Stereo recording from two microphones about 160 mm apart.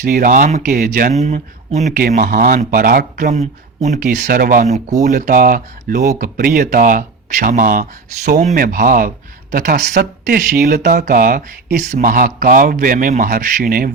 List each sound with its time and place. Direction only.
0.0 s speech: 60° right (ahead or behind)
1.2 s speech: 45° right (ahead or behind)
1.9 s speech: 60° right (ahead or behind)
3.8 s speech: 50° right (ahead or behind)
4.2 s speech: 60° right (ahead or behind)